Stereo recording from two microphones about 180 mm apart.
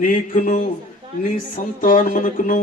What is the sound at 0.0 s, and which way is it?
Speech, 50° left (ahead or behind).